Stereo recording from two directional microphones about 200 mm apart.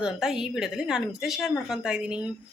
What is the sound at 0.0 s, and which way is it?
A woman's voice, 5° right (ahead or behind).